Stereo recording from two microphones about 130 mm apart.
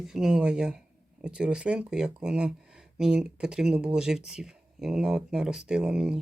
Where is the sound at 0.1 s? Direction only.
5° right (ahead or behind).